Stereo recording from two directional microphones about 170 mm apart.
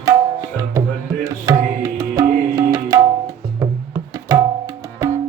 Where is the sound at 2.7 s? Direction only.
20° right (ahead or behind).